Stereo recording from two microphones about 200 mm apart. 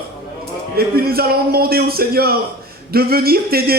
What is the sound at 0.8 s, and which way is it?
Speech, 50° right (ahead or behind).